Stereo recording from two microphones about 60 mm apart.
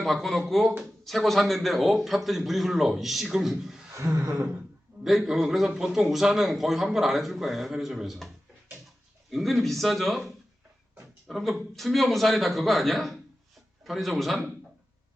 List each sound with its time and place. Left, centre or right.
0.0 s a man's voice: centre
3.9 s gasp: right
5.0 s a man's voice: centre
9.3 s a man's voice: centre